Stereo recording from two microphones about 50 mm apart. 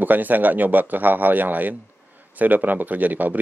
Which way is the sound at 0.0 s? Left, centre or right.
Right.